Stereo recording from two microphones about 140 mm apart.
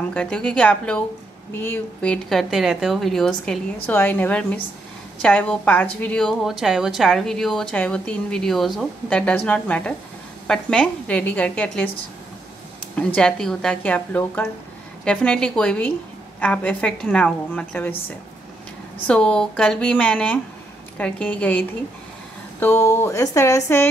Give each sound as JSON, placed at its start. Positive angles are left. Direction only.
{"t": 0.1, "sound": "a woman's voice", "side_deg": 10}
{"t": 12.9, "sound": "speech", "side_deg": 5}
{"t": 19.0, "sound": "speech", "side_deg": 5}